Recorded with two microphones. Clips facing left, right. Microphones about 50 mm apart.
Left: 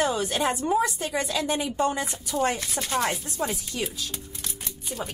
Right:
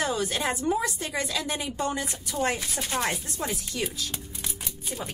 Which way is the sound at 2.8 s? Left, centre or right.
Centre.